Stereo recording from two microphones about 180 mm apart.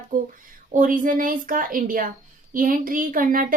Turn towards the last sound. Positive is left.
turn(degrees=-50)  # may be behind; listen again after turning